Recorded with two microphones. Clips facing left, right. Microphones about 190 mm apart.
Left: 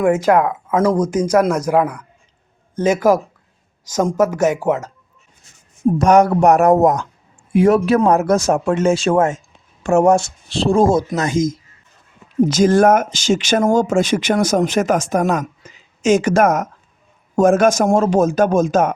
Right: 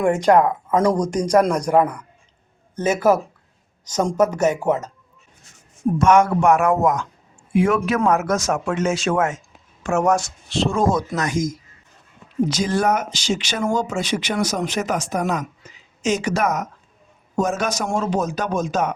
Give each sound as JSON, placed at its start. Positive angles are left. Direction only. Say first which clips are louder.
{"t": 0.0, "sound": "speech", "louder": "left 1 dB", "side_deg": 5}
{"t": 6.0, "sound": "speech", "louder": "left 3 dB", "side_deg": 35}
{"t": 12.5, "sound": "speech", "louder": "left 9 dB", "side_deg": 45}